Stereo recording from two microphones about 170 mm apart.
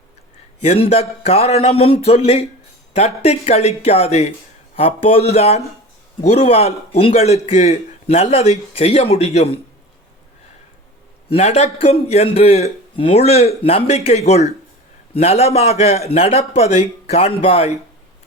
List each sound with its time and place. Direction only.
0.6 s speech: 40° left (ahead or behind)
11.3 s speech: 40° left (ahead or behind)